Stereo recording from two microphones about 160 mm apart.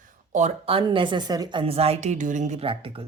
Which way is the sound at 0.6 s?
35° right (ahead or behind).